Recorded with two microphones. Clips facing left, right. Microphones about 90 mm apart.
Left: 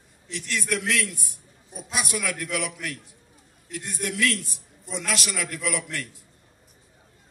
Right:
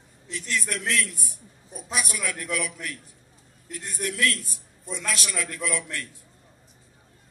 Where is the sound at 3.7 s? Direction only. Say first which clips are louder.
Left 1 dB; 40° right (ahead or behind).